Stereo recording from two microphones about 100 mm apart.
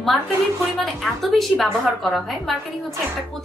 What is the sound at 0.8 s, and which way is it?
A woman's voice, centre (ahead or behind).